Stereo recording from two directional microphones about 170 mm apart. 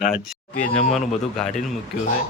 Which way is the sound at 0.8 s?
5° left (ahead or behind).